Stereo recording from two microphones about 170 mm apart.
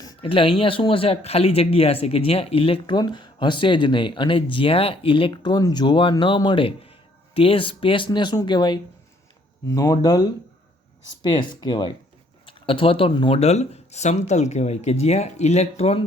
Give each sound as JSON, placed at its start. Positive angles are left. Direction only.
{"t": 0.0, "sound": "speech", "side_deg": 25}